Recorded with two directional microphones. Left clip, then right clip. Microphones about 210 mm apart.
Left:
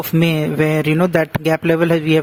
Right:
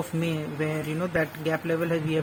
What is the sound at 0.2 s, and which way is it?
Speech, 50° left (ahead or behind).